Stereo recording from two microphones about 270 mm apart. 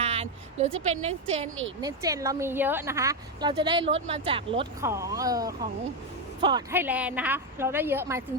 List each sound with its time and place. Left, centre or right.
0.0 s speech: right
1.8 s speech: centre